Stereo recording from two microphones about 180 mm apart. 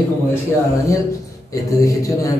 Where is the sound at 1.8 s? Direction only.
20° left (ahead or behind).